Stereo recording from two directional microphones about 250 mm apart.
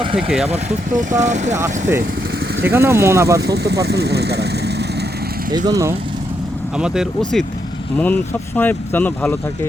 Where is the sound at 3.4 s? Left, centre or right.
Right.